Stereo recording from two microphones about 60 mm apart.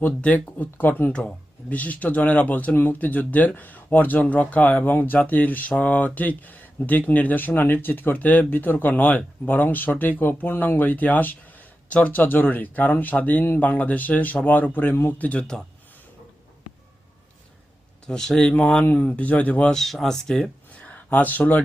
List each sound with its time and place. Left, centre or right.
0.4 s speech: left
1.1 s speech: centre; by 15.1 s left
15.2 s speech: left
18.0 s speech: centre
19.7 s speech: centre
20.8 s a sound: left